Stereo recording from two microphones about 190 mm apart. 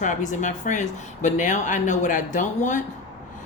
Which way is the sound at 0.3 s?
40° left (ahead or behind).